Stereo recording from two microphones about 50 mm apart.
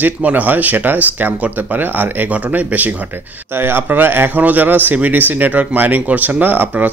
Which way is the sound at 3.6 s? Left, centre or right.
Right.